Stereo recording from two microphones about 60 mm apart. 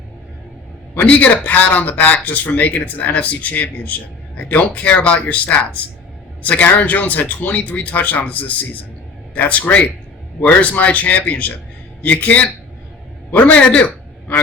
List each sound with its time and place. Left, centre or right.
0.9 s a man's voice: left